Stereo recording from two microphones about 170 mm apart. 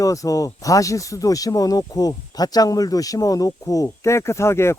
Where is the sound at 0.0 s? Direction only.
20° left (ahead or behind).